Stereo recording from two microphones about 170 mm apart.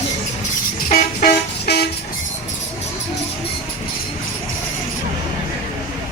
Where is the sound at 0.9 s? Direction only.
70° left (ahead or behind).